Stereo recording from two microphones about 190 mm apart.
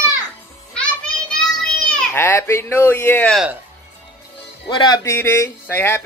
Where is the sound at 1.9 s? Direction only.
10° left (ahead or behind).